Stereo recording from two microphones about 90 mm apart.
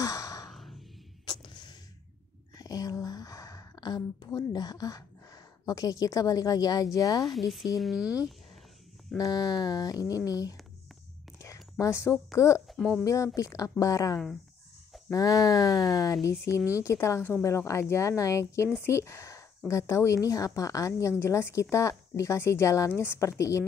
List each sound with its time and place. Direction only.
0.0 s sigh: 40° left (ahead or behind)
0.5 s music: centre (ahead or behind)
1.2 s a sound: 60° left (ahead or behind)
2.5 s a sound: 45° left (ahead or behind)
7.3 s speech: centre (ahead or behind)
9.2 s a sound: 50° left (ahead or behind)
11.3 s whispering: 35° left (ahead or behind)
11.8 s a woman's voice: 35° left (ahead or behind)
12.6 s speech: centre (ahead or behind)
13.0 s a woman's voice: 35° left (ahead or behind)